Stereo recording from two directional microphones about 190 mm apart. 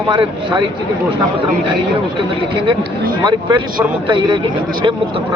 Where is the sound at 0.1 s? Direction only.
25° right (ahead or behind).